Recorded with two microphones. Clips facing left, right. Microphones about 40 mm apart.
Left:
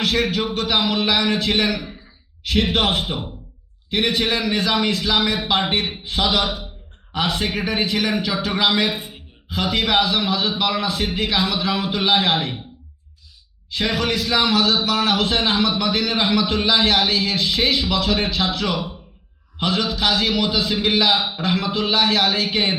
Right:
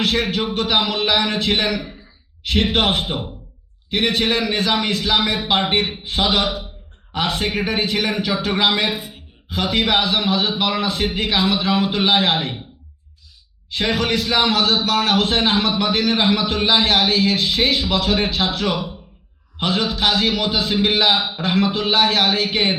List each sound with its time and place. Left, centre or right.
0.0 s a man's voice: right
13.7 s a man's voice: right
19.5 s a man's voice: right